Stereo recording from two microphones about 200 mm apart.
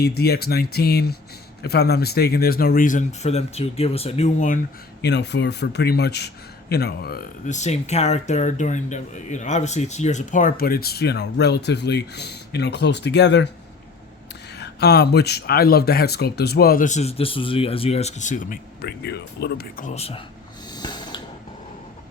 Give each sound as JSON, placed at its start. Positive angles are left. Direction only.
{"t": 0.0, "sound": "a man's voice", "side_deg": 50}
{"t": 5.0, "sound": "a man's voice", "side_deg": 60}
{"t": 14.6, "sound": "a man's voice", "side_deg": 55}
{"t": 20.7, "sound": "snort", "side_deg": 20}